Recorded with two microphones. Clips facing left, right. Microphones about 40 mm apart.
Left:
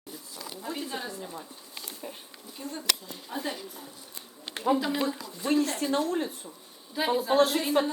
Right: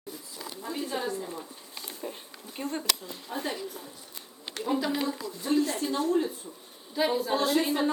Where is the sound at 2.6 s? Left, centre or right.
Right.